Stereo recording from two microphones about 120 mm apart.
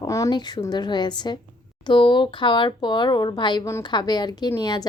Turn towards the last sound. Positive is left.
turn(degrees=35)  # may be behind; listen again after turning